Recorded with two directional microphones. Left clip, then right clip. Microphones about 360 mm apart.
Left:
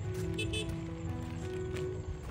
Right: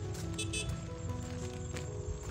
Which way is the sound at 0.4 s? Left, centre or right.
Centre.